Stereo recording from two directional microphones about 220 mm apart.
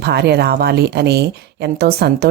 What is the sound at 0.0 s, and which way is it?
A woman's voice, 50° right (ahead or behind).